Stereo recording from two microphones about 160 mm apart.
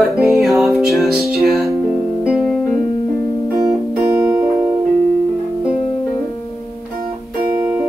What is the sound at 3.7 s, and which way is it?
Music, 15° right (ahead or behind).